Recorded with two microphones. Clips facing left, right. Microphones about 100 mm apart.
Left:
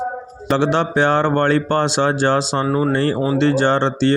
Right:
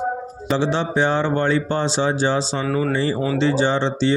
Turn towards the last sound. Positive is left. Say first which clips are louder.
# left 3 dB
turn(degrees=55)  # may be behind; listen again after turning